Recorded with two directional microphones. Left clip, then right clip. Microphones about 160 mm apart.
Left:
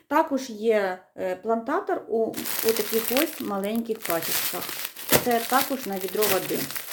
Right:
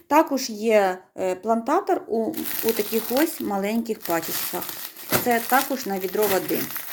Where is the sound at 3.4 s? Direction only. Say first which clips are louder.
Right 2 dB; 15° right (ahead or behind).